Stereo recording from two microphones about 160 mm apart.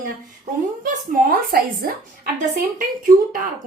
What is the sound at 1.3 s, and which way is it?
Speech, 65° right (ahead or behind).